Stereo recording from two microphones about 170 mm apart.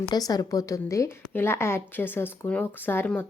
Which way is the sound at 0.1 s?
25° left (ahead or behind).